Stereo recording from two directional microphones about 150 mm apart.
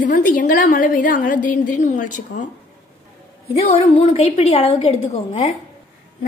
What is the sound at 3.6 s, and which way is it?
A woman's voice, 40° left (ahead or behind).